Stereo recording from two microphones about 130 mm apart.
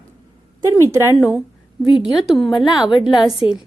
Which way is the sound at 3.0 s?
5° right (ahead or behind).